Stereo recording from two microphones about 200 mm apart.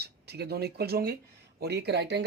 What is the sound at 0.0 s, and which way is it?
Speech, 55° right (ahead or behind).